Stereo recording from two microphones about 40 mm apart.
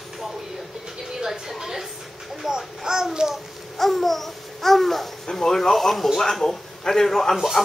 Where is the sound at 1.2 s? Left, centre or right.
Centre.